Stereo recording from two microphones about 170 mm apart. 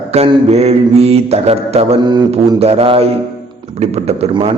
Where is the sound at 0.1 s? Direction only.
40° right (ahead or behind).